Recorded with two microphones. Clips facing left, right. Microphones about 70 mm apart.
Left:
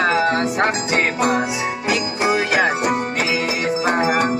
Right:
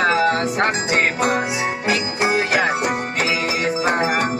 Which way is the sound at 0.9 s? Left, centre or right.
Right.